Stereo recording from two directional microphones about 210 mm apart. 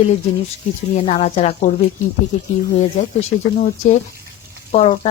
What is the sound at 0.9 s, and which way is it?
Speech, 25° left (ahead or behind).